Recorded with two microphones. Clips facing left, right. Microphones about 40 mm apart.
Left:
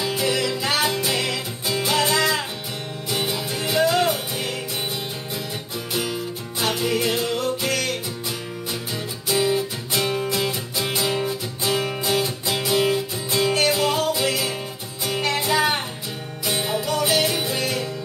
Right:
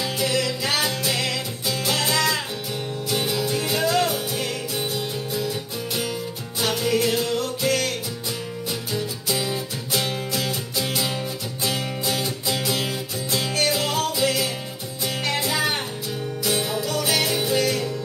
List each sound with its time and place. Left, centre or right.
0.0 s music: centre
6.6 s music: centre
8.9 s music: centre